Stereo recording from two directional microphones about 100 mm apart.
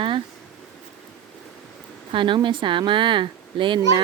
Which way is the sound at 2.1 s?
55° right (ahead or behind).